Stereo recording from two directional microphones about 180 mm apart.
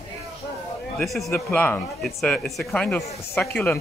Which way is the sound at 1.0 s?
Centre (ahead or behind).